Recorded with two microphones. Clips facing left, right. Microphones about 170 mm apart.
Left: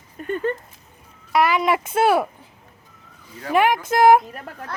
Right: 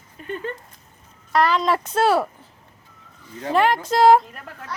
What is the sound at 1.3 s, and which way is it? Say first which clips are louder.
Speech: left 1 dB; 10° left (ahead or behind).